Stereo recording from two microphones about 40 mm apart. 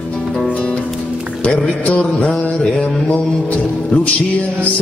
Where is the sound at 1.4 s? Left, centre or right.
Left.